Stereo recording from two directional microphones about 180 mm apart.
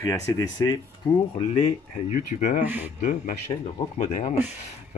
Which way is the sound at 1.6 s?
40° left (ahead or behind).